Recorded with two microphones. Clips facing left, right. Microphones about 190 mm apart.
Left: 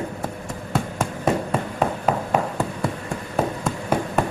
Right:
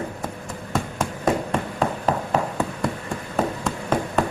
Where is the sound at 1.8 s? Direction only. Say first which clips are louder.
Left 1 dB; 5° left (ahead or behind).